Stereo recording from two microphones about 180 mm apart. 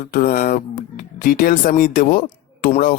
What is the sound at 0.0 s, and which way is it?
Speech, 50° left (ahead or behind).